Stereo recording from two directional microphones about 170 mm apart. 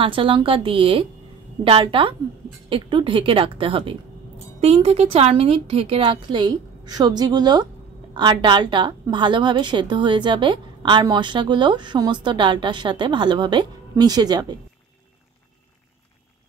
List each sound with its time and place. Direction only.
0.0 s a woman's voice: 30° right (ahead or behind)